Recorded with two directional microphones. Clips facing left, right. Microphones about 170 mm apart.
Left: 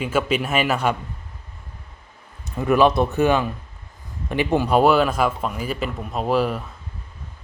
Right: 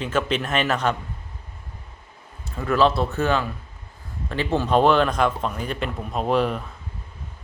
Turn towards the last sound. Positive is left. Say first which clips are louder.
# left 1 dB
turn(degrees=5)  # may be behind; listen again after turning